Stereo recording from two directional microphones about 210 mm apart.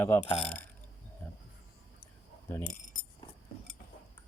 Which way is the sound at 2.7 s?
40° left (ahead or behind).